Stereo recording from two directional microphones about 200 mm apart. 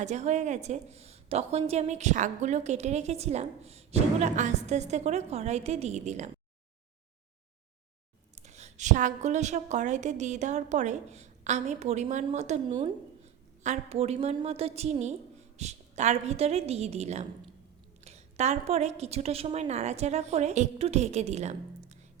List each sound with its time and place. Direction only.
0.0 s a woman's voice: 35° right (ahead or behind)
8.4 s a woman's voice: 35° right (ahead or behind)